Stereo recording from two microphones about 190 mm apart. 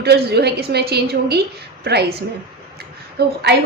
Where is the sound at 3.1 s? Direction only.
60° right (ahead or behind).